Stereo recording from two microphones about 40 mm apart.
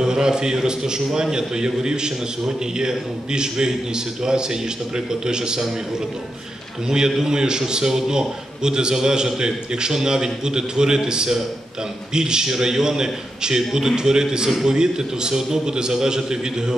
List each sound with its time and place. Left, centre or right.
0.0 s a man's voice: centre
7.1 s a man's voice: centre